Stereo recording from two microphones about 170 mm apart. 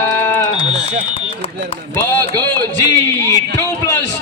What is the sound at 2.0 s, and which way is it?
Speech, 20° left (ahead or behind).